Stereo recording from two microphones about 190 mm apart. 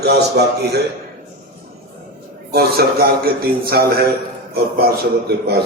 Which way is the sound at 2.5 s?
55° right (ahead or behind).